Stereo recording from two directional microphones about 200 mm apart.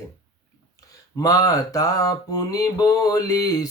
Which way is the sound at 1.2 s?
15° left (ahead or behind).